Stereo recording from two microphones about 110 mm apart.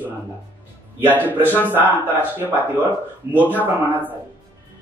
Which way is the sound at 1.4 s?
15° right (ahead or behind).